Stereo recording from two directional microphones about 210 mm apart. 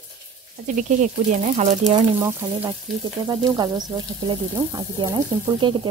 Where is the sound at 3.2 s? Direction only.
20° right (ahead or behind).